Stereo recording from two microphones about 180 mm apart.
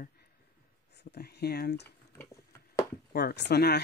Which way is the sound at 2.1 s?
15° left (ahead or behind).